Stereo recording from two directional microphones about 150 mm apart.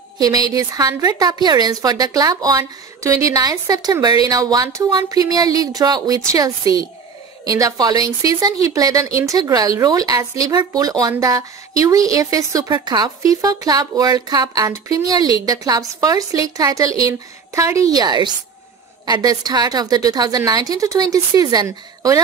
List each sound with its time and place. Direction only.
0.2 s a woman's voice: 25° right (ahead or behind)